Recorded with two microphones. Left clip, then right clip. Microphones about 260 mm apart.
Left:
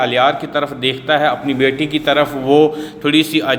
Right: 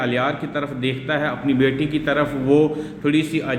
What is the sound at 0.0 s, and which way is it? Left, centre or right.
A man's voice, centre.